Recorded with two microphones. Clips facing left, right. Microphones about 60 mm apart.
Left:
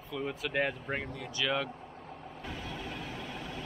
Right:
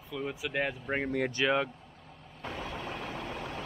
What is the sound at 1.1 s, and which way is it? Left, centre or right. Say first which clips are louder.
Speech: right 11 dB; right.